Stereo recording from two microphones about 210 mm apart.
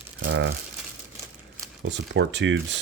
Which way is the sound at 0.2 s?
50° right (ahead or behind).